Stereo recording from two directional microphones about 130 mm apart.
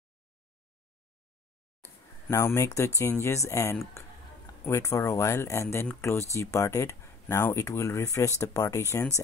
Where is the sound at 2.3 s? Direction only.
20° left (ahead or behind).